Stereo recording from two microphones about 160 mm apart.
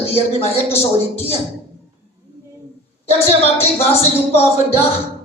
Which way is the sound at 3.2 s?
40° left (ahead or behind).